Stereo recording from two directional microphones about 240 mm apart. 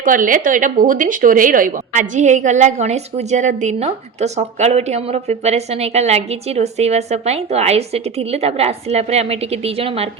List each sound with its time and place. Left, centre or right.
0.0 s a woman's voice: right